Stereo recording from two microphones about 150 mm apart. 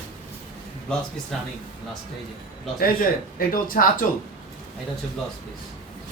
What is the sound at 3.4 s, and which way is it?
Speech, 75° left (ahead or behind).